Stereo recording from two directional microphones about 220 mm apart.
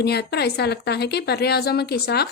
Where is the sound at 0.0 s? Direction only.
45° left (ahead or behind).